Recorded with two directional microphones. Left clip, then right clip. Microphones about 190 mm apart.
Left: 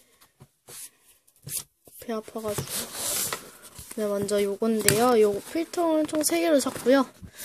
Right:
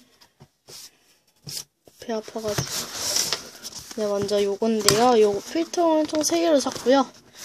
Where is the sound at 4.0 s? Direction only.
15° left (ahead or behind).